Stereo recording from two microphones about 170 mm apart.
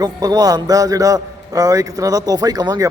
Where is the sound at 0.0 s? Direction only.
20° right (ahead or behind).